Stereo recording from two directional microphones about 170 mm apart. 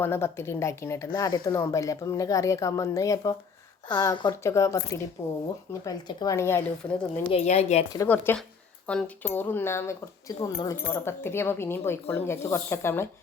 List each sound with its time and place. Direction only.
0.0 s speech: 15° left (ahead or behind)
7.3 s a woman's voice: 40° left (ahead or behind)
7.9 s speech: 10° left (ahead or behind)